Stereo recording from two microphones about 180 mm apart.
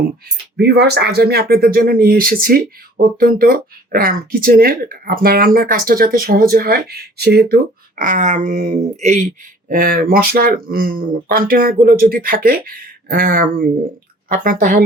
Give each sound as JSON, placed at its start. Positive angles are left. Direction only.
{"t": 0.5, "sound": "speech", "side_deg": -65}
{"t": 9.6, "sound": "speech", "side_deg": -50}